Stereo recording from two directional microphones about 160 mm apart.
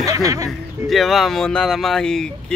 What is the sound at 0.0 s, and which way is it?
Music, 20° right (ahead or behind).